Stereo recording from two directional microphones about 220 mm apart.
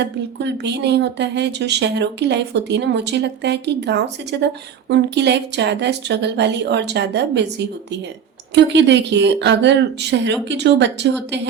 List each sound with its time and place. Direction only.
0.0 s speech: 50° right (ahead or behind)